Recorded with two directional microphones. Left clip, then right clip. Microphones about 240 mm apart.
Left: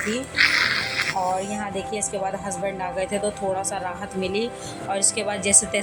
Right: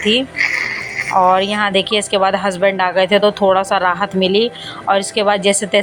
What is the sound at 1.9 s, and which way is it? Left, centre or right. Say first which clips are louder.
A woman's voice: right 12 dB; centre.